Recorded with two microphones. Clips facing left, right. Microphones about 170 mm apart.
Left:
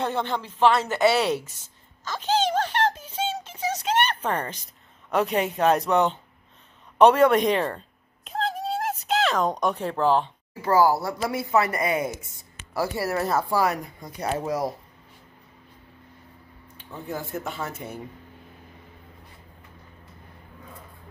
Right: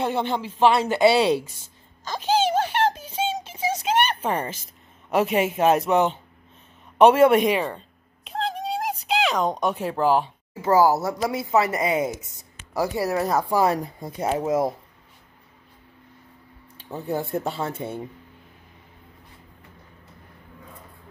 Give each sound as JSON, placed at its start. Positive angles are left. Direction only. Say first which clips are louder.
{"t": 0.0, "sound": "speech", "louder": "right 2 dB", "side_deg": -10}
{"t": 2.0, "sound": "music", "louder": "right 2 dB", "side_deg": -10}
{"t": 3.6, "sound": "a sound", "louder": "right 2 dB", "side_deg": -10}
{"t": 5.1, "sound": "speech", "louder": "right 2 dB", "side_deg": -10}
{"t": 8.3, "sound": "a sound", "louder": "even", "side_deg": 0}
{"t": 10.6, "sound": "speech", "louder": "right 2 dB", "side_deg": -20}
{"t": 13.7, "sound": "speech", "louder": "right 4 dB", "side_deg": -30}
{"t": 16.7, "sound": "speech", "louder": "right 6 dB", "side_deg": -35}